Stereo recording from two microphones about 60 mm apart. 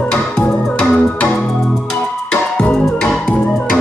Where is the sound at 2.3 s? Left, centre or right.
Centre.